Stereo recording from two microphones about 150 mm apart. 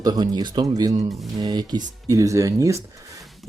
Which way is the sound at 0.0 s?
25° right (ahead or behind).